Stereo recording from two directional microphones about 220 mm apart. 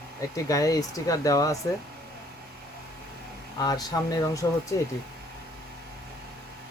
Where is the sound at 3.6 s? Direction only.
15° left (ahead or behind).